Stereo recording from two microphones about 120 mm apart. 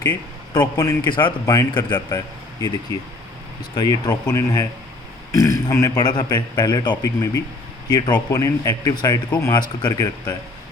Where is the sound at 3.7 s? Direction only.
30° left (ahead or behind).